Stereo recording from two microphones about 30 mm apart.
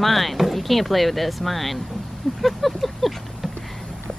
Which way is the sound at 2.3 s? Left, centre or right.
Centre.